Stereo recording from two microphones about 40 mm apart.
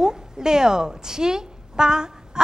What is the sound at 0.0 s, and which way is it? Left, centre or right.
A woman's voice, centre.